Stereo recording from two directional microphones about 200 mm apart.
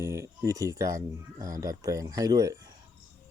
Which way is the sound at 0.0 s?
15° right (ahead or behind).